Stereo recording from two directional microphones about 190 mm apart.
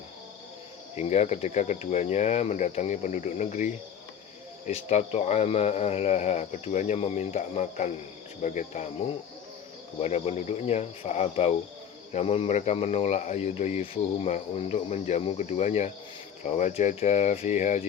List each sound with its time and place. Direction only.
0.9 s speech: 35° left (ahead or behind)
10.0 s speech: 35° left (ahead or behind)